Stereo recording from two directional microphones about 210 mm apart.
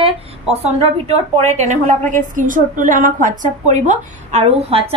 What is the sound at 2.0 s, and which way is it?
A woman's voice, 40° right (ahead or behind).